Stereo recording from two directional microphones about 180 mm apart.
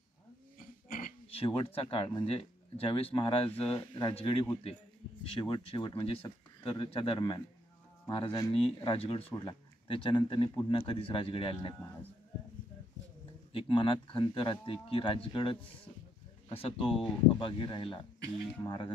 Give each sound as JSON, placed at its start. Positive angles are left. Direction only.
{"t": 0.6, "sound": "cough", "side_deg": 50}
{"t": 1.3, "sound": "speech", "side_deg": 30}
{"t": 13.5, "sound": "speech", "side_deg": 30}